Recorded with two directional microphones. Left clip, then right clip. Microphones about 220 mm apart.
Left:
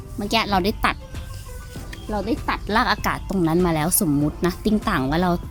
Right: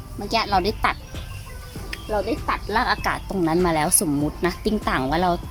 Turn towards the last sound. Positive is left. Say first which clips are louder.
# right 1 dB
turn(degrees=25)  # may be behind; listen again after turning